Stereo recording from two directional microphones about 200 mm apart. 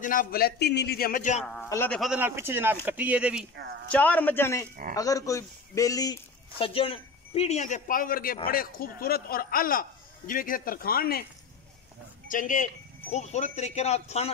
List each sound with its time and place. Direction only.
0.0 s speech: 45° left (ahead or behind)
1.4 s a man's voice: centre (ahead or behind)
1.7 s a man's voice: 10° left (ahead or behind)
2.0 s speech: 5° right (ahead or behind)
3.9 s a man's voice: 10° left (ahead or behind)
6.6 s speech: 30° left (ahead or behind); by 11.2 s 50° left (ahead or behind)
12.3 s speech: 40° left (ahead or behind)